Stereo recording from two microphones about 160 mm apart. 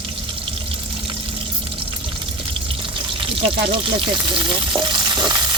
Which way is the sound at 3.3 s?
35° right (ahead or behind).